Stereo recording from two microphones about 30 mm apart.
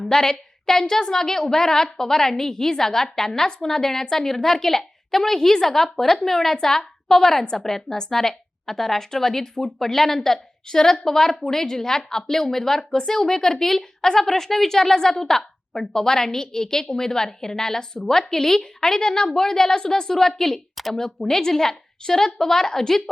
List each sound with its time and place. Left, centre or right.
0.1 s a woman's voice: left